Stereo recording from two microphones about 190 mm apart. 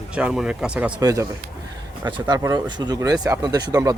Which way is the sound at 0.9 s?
20° right (ahead or behind).